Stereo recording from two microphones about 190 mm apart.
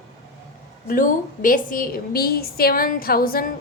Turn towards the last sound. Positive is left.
turn(degrees=50)  # may be behind; listen again after turning